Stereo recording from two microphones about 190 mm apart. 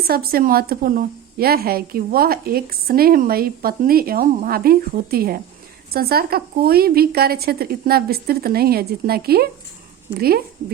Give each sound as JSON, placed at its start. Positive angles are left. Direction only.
{"t": 0.0, "sound": "a woman's voice", "side_deg": -55}